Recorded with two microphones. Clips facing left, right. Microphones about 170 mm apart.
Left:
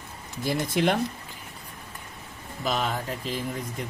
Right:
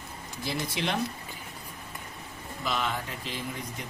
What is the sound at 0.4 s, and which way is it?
Speech, 50° left (ahead or behind).